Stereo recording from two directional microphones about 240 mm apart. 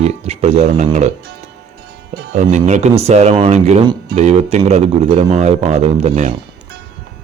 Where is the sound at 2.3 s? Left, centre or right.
Right.